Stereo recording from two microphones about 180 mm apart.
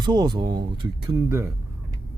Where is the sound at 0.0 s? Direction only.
25° right (ahead or behind).